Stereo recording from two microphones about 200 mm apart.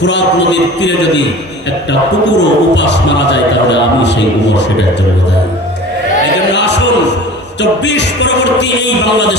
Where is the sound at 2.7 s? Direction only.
60° left (ahead or behind).